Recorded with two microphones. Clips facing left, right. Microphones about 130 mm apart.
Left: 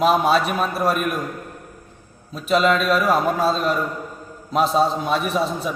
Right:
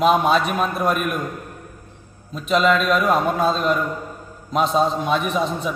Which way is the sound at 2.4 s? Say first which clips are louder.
Even; centre (ahead or behind).